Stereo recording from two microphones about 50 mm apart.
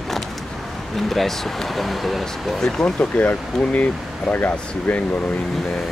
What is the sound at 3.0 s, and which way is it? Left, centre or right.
Speech, left.